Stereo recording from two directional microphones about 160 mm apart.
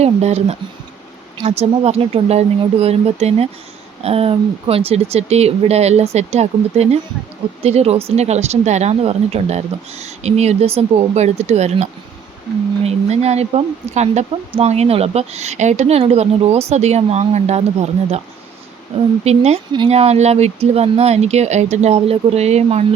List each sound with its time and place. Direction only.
0.0 s a woman's voice: 40° right (ahead or behind)
19.2 s speech: 40° right (ahead or behind)